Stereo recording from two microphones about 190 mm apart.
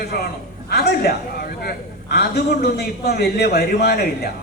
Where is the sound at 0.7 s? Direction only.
55° left (ahead or behind).